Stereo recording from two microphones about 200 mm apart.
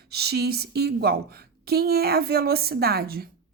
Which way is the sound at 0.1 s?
55° right (ahead or behind).